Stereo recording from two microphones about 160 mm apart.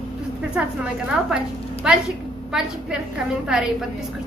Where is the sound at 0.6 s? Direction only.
5° right (ahead or behind).